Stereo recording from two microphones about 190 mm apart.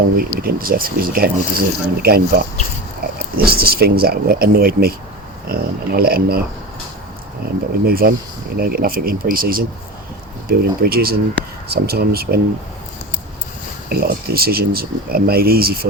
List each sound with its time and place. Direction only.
0.2 s speech: 50° right (ahead or behind)
7.4 s speech: 50° right (ahead or behind)
13.9 s speech: 55° right (ahead or behind)